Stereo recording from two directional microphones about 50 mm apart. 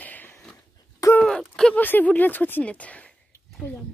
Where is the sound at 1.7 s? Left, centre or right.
Left.